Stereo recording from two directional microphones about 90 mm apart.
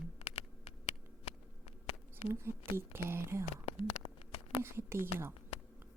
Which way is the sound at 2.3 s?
30° right (ahead or behind).